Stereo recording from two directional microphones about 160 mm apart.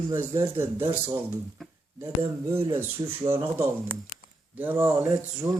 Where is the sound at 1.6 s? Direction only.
Centre (ahead or behind).